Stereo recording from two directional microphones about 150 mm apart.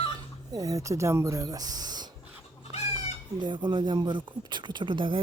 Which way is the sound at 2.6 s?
45° left (ahead or behind).